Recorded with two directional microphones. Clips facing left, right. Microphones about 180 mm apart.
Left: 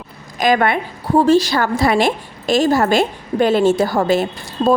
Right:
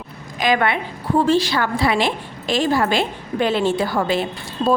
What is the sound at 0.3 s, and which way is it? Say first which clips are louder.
A woman's voice: left 3 dB; 45° left (ahead or behind).